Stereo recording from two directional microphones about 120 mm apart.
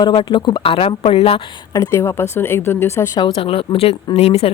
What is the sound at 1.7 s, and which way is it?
Speech, 25° left (ahead or behind).